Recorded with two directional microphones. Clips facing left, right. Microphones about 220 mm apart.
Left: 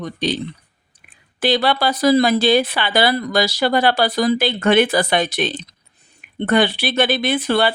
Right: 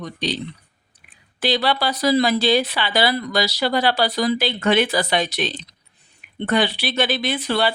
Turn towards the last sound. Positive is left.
turn(degrees=55)  # may be behind; listen again after turning